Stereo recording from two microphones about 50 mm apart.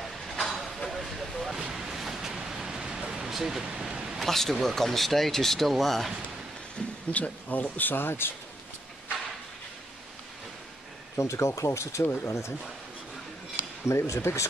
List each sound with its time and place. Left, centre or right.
0.0 s a sound: centre
1.6 s a sound: centre
4.2 s speech: centre
7.1 s speech: left
7.7 s speech: left
11.1 s speech: left
12.0 s speech: left
13.8 s speech: left